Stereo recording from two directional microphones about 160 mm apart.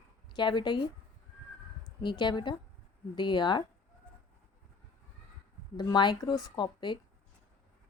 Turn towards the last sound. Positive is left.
turn(degrees=30)  # may be behind; listen again after turning